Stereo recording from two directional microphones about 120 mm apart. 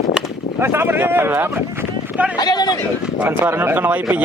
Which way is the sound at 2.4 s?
35° left (ahead or behind).